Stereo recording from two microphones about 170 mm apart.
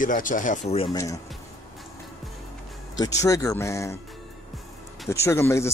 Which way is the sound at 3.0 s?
20° left (ahead or behind).